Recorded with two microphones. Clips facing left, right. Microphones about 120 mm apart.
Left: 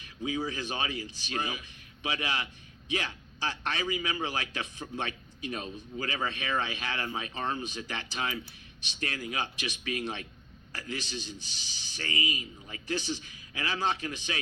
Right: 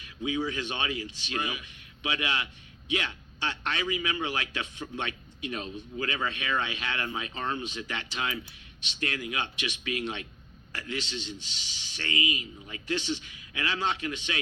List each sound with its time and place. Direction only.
0.3 s a man's voice: 30° left (ahead or behind)